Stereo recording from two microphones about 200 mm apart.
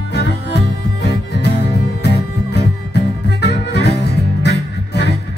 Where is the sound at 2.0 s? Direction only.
55° left (ahead or behind).